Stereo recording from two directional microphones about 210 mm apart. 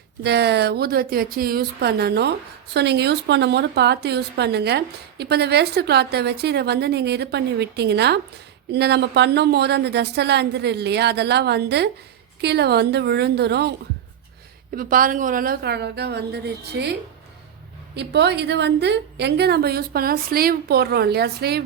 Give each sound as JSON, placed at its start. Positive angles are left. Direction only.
{"t": 0.2, "sound": "a woman's voice", "side_deg": -50}
{"t": 14.8, "sound": "a woman's voice", "side_deg": -40}
{"t": 17.9, "sound": "a woman's voice", "side_deg": -55}